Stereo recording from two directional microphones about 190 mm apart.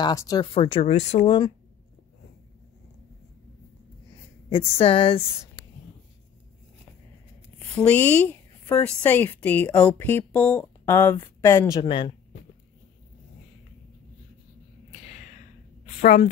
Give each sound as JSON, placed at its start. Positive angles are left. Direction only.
{"t": 0.0, "sound": "speech", "side_deg": 20}
{"t": 4.5, "sound": "speech", "side_deg": 30}
{"t": 7.5, "sound": "a woman's voice", "side_deg": 5}
{"t": 11.8, "sound": "speech", "side_deg": 25}
{"t": 14.9, "sound": "a sound", "side_deg": 35}